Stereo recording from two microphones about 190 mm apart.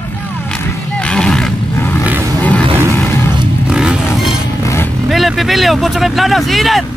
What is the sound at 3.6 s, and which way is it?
Vehicle, 5° right (ahead or behind).